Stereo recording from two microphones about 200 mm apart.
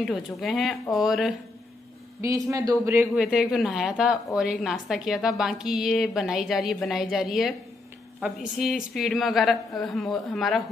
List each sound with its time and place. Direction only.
0.0 s a woman's voice: centre (ahead or behind)
2.2 s a man's voice: 15° right (ahead or behind)
3.1 s a woman's voice: 5° right (ahead or behind)